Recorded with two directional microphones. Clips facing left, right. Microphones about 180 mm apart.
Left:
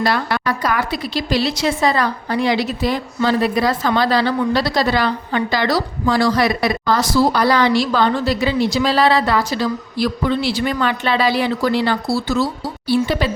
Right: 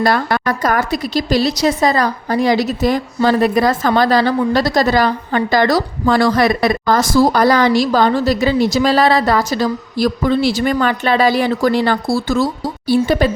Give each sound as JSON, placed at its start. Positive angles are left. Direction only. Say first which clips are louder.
{"t": 0.0, "sound": "a woman's voice", "louder": "right 3 dB", "side_deg": -45}